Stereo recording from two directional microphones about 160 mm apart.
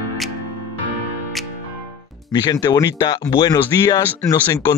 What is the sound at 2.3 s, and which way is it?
Speech, 25° left (ahead or behind).